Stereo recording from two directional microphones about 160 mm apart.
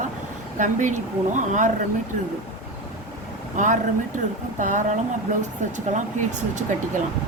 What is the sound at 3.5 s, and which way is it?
Speech, 50° right (ahead or behind).